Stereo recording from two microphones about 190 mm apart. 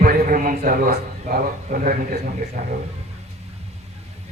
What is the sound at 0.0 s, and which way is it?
Speech, 45° right (ahead or behind).